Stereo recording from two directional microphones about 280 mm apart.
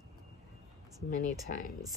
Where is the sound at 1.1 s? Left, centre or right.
Left.